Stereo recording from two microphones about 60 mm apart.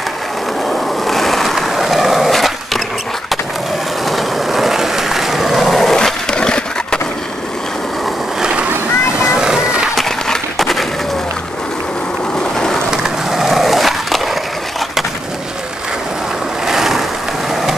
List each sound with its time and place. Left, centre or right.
0.7 s skateboard: centre
4.1 s skateboard: centre
8.4 s splash: centre
9.4 s skateboard: centre
9.9 s a sound: centre
12.9 s skateboard: centre
16.6 s vehicle: centre